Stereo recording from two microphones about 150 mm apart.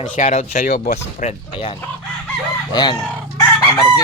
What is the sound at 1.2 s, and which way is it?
Speech, 50° left (ahead or behind).